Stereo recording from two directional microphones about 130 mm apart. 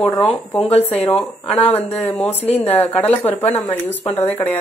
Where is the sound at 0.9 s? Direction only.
15° left (ahead or behind).